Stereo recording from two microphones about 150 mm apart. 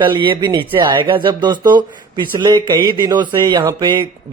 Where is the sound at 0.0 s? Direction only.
30° right (ahead or behind).